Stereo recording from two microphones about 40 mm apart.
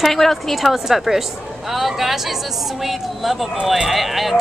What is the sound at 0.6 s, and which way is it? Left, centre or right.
A woman's voice, centre.